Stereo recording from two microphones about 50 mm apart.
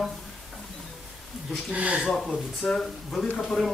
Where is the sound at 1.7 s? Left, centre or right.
Right.